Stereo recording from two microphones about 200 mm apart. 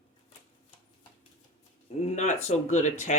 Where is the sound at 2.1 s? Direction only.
35° left (ahead or behind).